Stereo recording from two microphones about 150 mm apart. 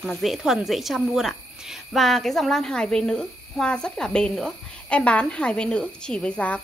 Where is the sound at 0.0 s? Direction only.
Centre (ahead or behind).